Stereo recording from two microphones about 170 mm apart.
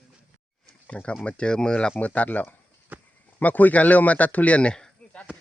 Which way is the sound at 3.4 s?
10° left (ahead or behind).